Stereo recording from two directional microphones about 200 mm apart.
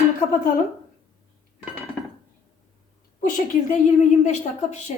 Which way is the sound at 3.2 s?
40° left (ahead or behind).